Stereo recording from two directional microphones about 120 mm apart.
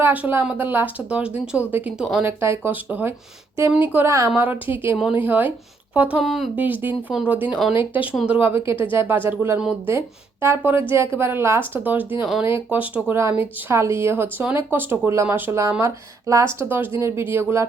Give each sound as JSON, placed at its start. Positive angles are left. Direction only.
{"t": 0.0, "sound": "speech", "side_deg": -15}
{"t": 6.2, "sound": "speech", "side_deg": 0}
{"t": 6.6, "sound": "speech", "side_deg": -15}
{"t": 7.1, "sound": "speech", "side_deg": -5}
{"t": 8.1, "sound": "speech", "side_deg": 0}
{"t": 8.4, "sound": "speech", "side_deg": -15}